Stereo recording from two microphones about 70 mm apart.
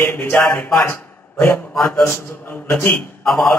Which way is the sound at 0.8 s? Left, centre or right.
Left.